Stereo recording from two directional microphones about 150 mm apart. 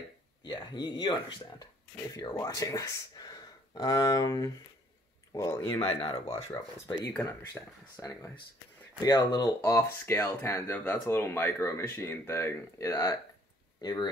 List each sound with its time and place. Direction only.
0.5 s speech: 30° left (ahead or behind)
5.8 s speech: 35° left (ahead or behind)
7.4 s speech: 25° left (ahead or behind)